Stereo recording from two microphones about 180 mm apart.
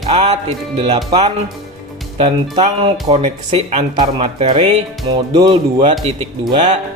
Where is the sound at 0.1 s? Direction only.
35° right (ahead or behind).